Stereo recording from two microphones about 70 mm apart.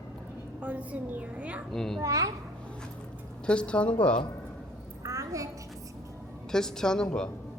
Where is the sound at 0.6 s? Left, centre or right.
Right.